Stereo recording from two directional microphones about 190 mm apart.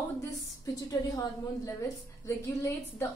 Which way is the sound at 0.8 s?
20° left (ahead or behind).